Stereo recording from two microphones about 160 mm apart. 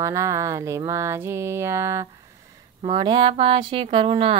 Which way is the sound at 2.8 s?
30° right (ahead or behind).